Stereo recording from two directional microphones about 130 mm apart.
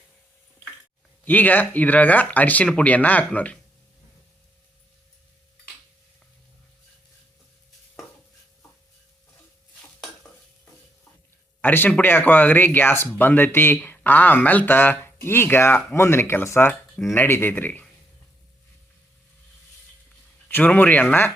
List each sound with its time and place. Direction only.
1.2 s speech: 10° left (ahead or behind)
11.6 s speech: 15° left (ahead or behind)
20.5 s speech: 15° left (ahead or behind)